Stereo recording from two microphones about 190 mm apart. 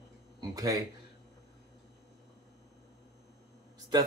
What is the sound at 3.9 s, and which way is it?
Speech, 20° right (ahead or behind).